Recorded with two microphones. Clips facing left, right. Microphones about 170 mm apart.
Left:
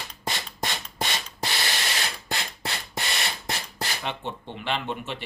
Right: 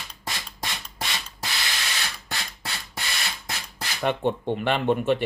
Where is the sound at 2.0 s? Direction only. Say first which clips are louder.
Left 3 dB; 25° left (ahead or behind).